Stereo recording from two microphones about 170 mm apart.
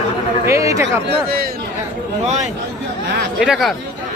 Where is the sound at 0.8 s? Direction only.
70° right (ahead or behind).